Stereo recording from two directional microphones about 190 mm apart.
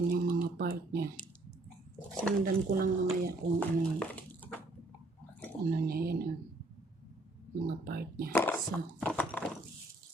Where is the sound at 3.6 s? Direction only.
10° left (ahead or behind).